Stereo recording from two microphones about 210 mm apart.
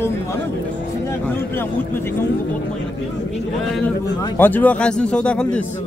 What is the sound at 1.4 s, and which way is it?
Speech, 10° left (ahead or behind).